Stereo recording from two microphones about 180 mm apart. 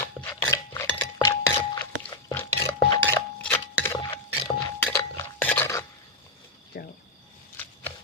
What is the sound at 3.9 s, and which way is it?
Music, 25° left (ahead or behind).